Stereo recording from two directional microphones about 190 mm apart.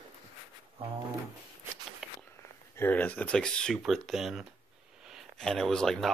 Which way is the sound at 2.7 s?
10° left (ahead or behind).